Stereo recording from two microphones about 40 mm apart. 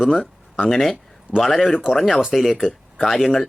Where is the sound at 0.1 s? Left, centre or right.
Centre.